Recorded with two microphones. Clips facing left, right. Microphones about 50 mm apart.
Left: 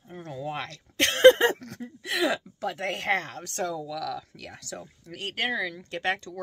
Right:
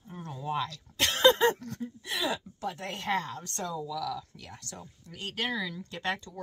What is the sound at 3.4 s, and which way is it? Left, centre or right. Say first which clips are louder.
Speech: left 4 dB; left.